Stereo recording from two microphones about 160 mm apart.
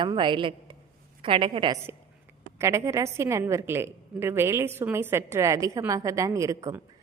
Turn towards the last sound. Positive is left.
turn(degrees=-20)  # may be behind; listen again after turning